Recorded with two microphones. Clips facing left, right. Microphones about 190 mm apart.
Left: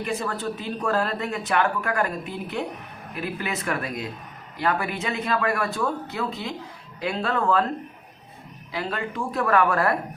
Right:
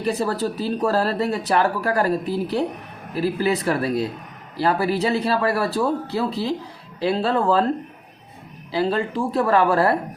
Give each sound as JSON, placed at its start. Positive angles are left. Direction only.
{"t": 0.0, "sound": "speech", "side_deg": -35}
{"t": 8.7, "sound": "speech", "side_deg": -30}